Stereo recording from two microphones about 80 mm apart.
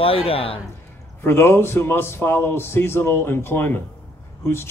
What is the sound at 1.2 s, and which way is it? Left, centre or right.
Speech, left.